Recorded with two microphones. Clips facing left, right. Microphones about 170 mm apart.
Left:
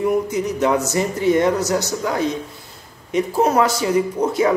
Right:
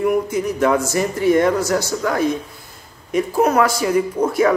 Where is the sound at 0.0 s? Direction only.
20° left (ahead or behind).